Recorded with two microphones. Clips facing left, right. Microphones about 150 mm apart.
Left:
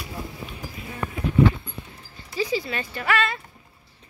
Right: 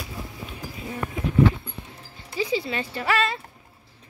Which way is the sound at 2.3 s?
25° right (ahead or behind).